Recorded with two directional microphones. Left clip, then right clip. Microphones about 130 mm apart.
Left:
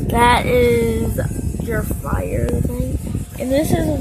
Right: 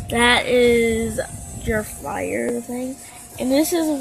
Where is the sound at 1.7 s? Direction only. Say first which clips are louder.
Even; 5° left (ahead or behind).